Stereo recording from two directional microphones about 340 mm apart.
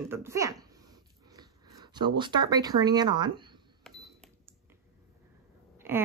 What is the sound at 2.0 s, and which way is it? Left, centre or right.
Speech, centre.